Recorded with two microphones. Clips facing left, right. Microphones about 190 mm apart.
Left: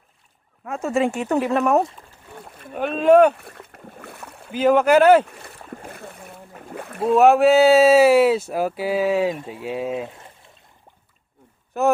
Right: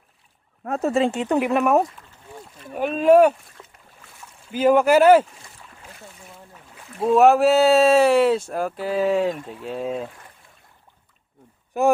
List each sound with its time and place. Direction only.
0.6 s speech: 35° right (ahead or behind); by 1.8 s 10° right (ahead or behind)
2.4 s rowboat: 60° left (ahead or behind)
2.7 s speech: 5° right (ahead or behind)
3.3 s rowboat: 60° left (ahead or behind)
4.6 s speech: 10° right (ahead or behind)
5.3 s boat: 60° left (ahead or behind)
7.0 s speech: centre (ahead or behind)
10.1 s a sound: 25° left (ahead or behind)
11.7 s speech: 15° right (ahead or behind)